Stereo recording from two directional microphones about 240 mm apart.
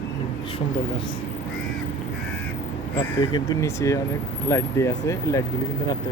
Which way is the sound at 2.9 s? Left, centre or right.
Centre.